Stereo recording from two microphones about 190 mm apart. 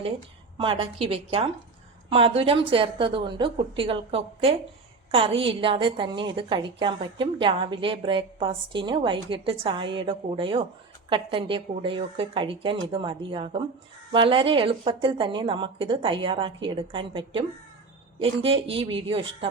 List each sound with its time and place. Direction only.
0.5 s a woman's voice: 25° right (ahead or behind)